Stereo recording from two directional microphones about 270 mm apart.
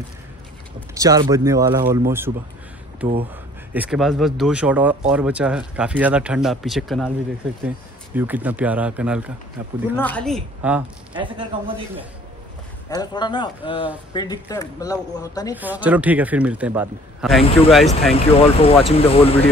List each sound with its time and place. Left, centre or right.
0.7 s a sound: centre
1.3 s speech: centre
3.7 s speech: centre
9.9 s speech: centre
11.1 s speech: centre
12.9 s speech: centre
15.5 s speech: centre
18.1 s speech: left